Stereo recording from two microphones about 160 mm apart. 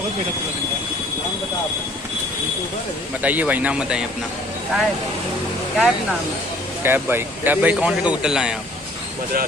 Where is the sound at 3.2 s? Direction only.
10° right (ahead or behind).